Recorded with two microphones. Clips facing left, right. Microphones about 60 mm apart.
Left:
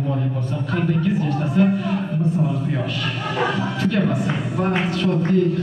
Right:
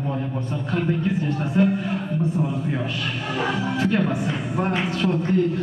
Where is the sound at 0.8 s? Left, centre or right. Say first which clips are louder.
Left 4 dB; right.